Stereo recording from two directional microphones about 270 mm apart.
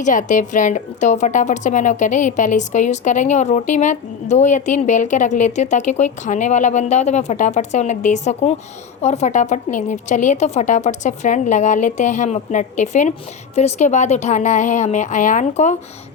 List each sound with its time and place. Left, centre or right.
0.0 s a woman's voice: left